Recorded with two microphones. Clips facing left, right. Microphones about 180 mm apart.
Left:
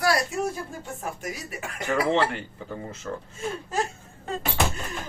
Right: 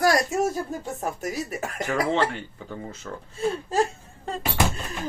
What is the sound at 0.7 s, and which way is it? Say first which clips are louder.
Speech: right 5 dB; 40° right (ahead or behind).